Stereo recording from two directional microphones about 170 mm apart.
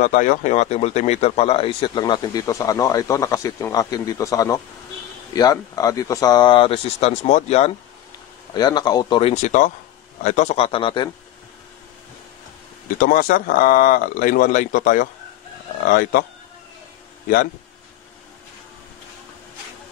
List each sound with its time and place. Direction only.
0.0 s speech: 50° left (ahead or behind)
8.5 s speech: 25° left (ahead or behind)
9.3 s speech: 45° left (ahead or behind); by 11.1 s 30° left (ahead or behind)
12.9 s speech: 55° left (ahead or behind)